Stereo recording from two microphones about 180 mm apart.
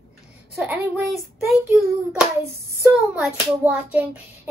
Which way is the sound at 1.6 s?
10° right (ahead or behind).